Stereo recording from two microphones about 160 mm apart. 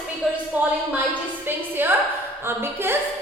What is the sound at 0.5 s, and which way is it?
A woman's voice, 10° right (ahead or behind).